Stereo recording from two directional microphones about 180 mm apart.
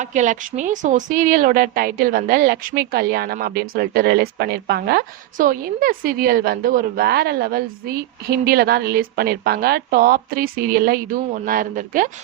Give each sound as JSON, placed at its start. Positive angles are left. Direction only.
{"t": 0.0, "sound": "a woman's voice", "side_deg": -40}